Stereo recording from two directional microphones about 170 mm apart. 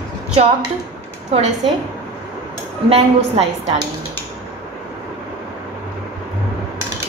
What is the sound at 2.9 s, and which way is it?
Speech, 35° right (ahead or behind).